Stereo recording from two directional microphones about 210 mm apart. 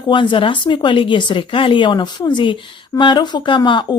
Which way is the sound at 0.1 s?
25° left (ahead or behind).